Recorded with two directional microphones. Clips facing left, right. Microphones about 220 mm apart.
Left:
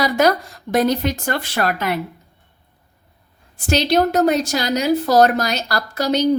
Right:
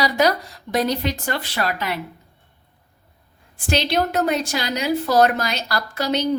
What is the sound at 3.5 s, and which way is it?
A woman's voice, 40° left (ahead or behind).